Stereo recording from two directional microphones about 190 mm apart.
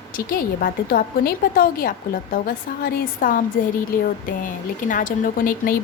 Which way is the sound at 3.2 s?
50° left (ahead or behind).